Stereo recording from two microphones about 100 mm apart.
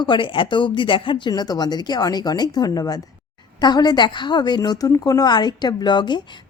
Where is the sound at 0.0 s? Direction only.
55° left (ahead or behind).